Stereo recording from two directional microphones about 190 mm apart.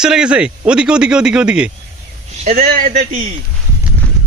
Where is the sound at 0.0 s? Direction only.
5° right (ahead or behind).